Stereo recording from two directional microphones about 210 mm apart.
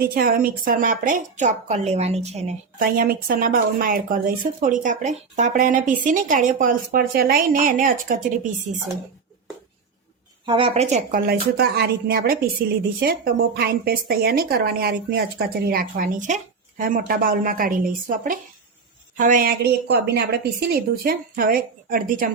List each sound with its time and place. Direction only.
0.0 s a woman's voice: 45° right (ahead or behind)
10.4 s a woman's voice: 25° right (ahead or behind)
11.3 s a woman's voice: 50° right (ahead or behind)
13.6 s a woman's voice: 45° right (ahead or behind)